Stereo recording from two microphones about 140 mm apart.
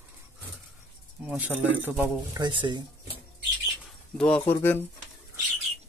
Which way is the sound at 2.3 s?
35° right (ahead or behind).